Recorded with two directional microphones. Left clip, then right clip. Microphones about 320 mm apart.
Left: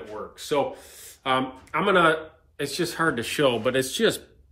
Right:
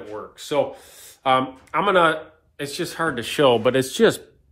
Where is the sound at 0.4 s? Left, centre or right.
Centre.